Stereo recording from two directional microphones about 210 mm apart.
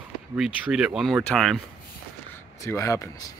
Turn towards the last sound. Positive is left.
turn(degrees=15)  # may be behind; listen again after turning